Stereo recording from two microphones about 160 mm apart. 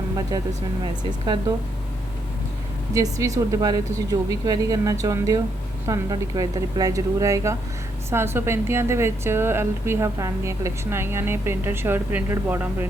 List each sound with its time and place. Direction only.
1.2 s speech: 25° right (ahead or behind)
2.9 s a woman's voice: 20° right (ahead or behind)